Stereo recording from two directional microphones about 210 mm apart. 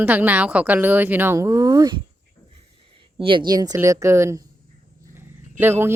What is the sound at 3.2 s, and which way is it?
Speech, 25° right (ahead or behind).